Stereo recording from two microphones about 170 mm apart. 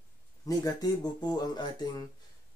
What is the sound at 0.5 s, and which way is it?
Speech, 25° left (ahead or behind).